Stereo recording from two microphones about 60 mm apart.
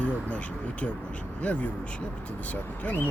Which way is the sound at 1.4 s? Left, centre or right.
Left.